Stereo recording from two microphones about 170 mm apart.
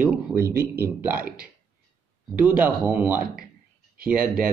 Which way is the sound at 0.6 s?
15° right (ahead or behind).